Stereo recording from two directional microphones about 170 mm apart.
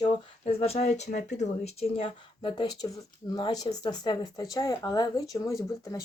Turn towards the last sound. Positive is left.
turn(degrees=20)  # may be behind; listen again after turning